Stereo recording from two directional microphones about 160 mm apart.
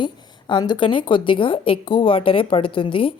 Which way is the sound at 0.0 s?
30° left (ahead or behind).